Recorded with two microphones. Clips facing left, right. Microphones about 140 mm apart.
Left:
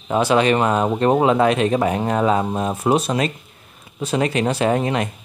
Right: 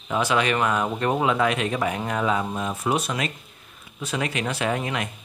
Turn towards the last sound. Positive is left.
turn(degrees=35)  # may be behind; listen again after turning